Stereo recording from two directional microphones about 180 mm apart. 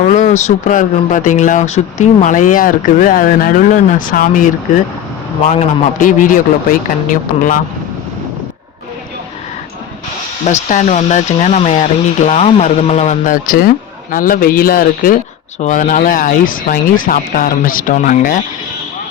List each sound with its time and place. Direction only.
0.1 s speech: 40° left (ahead or behind)
5.5 s speech: 45° left (ahead or behind)
10.4 s speech: 45° left (ahead or behind)